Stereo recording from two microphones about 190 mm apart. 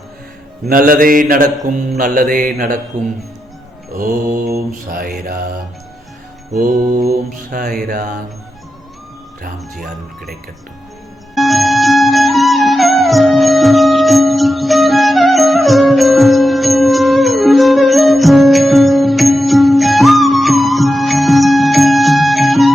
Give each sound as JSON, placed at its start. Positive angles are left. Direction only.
{"t": 0.7, "sound": "mantra", "side_deg": -50}
{"t": 3.9, "sound": "mantra", "side_deg": -45}
{"t": 6.5, "sound": "mantra", "side_deg": -45}
{"t": 11.3, "sound": "music", "side_deg": 0}